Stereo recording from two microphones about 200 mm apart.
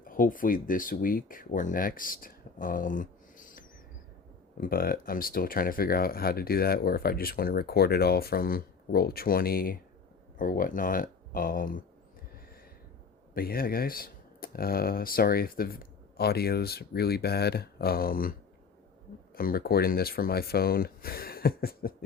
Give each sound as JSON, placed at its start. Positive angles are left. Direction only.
{"t": 0.0, "sound": "speech", "side_deg": 45}
{"t": 4.6, "sound": "speech", "side_deg": 45}
{"t": 13.3, "sound": "speech", "side_deg": 50}
{"t": 19.4, "sound": "speech", "side_deg": 50}